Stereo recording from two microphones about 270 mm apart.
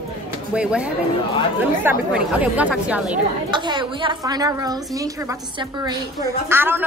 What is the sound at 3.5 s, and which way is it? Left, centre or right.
A woman's voice, centre.